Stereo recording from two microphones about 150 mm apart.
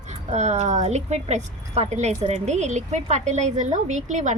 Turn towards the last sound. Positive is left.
turn(degrees=-50)  # may be behind; listen again after turning